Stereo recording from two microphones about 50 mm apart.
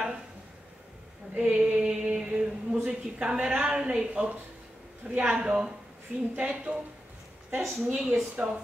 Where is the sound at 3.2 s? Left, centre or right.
Centre.